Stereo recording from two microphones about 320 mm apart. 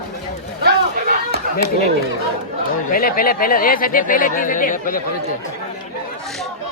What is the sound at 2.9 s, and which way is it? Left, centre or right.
Speech, left.